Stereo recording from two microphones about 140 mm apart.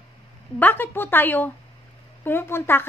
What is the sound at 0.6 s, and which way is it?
A woman's voice, 15° left (ahead or behind).